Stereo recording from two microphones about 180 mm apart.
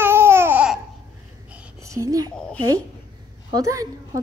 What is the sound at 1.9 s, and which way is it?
Speech, 20° right (ahead or behind).